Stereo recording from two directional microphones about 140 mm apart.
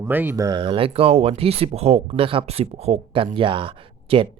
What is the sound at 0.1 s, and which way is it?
Speech, 15° right (ahead or behind).